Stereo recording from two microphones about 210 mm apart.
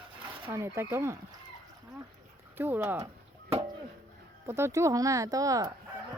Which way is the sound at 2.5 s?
10° right (ahead or behind).